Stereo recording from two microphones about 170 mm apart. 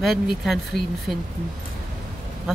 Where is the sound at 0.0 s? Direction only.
Centre (ahead or behind).